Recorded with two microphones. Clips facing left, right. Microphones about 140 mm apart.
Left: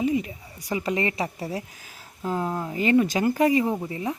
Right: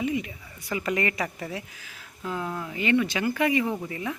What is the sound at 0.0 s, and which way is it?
Speech, 35° left (ahead or behind).